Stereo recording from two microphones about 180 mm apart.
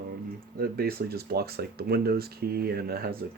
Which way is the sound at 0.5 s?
55° right (ahead or behind).